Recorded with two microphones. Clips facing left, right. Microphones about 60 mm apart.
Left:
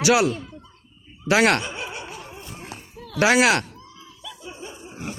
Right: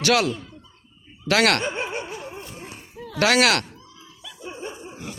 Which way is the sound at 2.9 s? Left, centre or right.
Centre.